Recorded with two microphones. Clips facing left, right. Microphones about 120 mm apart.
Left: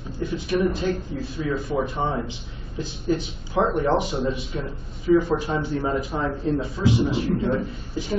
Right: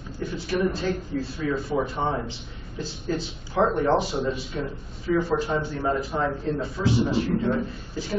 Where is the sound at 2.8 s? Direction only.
15° left (ahead or behind).